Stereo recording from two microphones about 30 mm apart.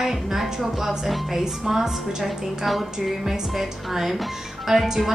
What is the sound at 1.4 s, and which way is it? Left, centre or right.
Speech, centre.